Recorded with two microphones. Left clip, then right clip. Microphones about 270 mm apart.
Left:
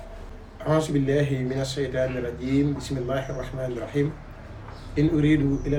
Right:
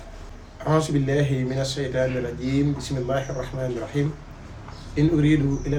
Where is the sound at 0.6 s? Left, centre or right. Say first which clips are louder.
Right 1 dB; centre.